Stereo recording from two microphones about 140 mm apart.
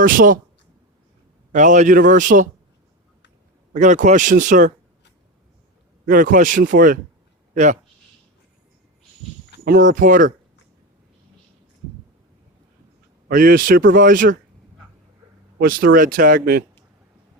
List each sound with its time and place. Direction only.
0.0 s speech: 80° right
1.5 s speech: 60° right (ahead or behind)
3.7 s speech: 60° right (ahead or behind)
6.1 s speech: 75° right (ahead or behind)
7.5 s speech: 60° right (ahead or behind)
9.6 s speech: 75° right (ahead or behind)
13.2 s a man's voice: 75° right (ahead or behind)
15.6 s speech: 90° right